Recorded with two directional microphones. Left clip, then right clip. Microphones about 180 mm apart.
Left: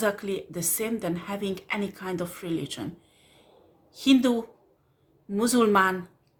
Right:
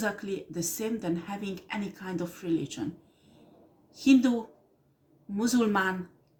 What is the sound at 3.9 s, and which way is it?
Speech, 45° left (ahead or behind).